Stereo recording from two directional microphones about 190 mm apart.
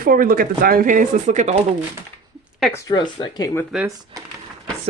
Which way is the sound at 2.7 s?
20° left (ahead or behind).